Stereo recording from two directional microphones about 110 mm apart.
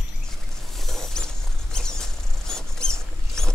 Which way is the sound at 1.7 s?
5° left (ahead or behind).